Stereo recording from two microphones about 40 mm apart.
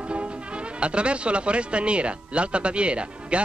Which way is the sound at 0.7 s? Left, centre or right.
Right.